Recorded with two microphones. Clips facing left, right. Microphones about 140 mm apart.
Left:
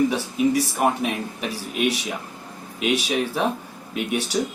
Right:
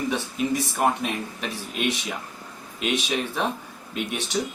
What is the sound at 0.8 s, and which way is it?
Speech, 5° left (ahead or behind).